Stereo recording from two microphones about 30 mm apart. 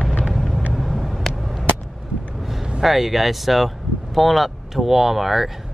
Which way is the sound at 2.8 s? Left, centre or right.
Centre.